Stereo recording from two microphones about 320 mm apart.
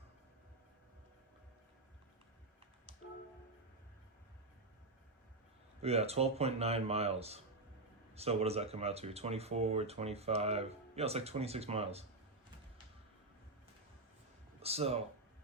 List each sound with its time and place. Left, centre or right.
5.8 s speech: centre
14.6 s speech: centre